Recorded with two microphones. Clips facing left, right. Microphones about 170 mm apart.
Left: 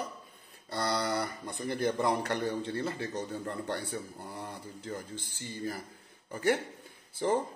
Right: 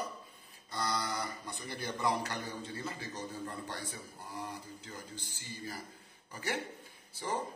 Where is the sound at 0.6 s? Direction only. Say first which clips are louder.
Left 5 dB; 65° left (ahead or behind).